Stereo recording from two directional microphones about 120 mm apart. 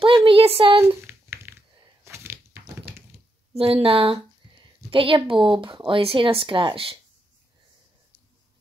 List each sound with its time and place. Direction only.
0.0 s speech: 45° right (ahead or behind)
0.8 s a sound: 20° right (ahead or behind)
3.5 s a woman's voice: 50° right (ahead or behind)